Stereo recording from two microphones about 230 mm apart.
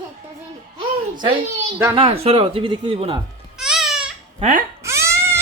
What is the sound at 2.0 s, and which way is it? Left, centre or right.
Speech, right.